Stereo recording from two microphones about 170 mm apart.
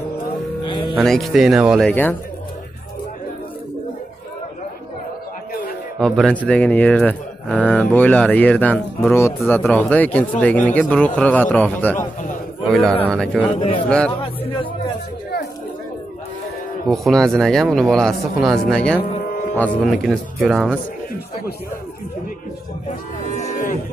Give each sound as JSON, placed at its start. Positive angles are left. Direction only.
{"t": 0.6, "sound": "music", "side_deg": 30}
{"t": 1.0, "sound": "speech", "side_deg": 0}
{"t": 5.9, "sound": "speech", "side_deg": 0}
{"t": 12.6, "sound": "a man's voice", "side_deg": 0}
{"t": 14.2, "sound": "a sound", "side_deg": 30}
{"t": 16.9, "sound": "speech", "side_deg": 0}
{"t": 22.8, "sound": "cattle", "side_deg": 45}